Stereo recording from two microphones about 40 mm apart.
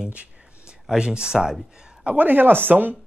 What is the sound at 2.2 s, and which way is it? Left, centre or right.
Speech, right.